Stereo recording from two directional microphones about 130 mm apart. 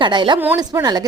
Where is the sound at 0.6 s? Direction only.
30° right (ahead or behind).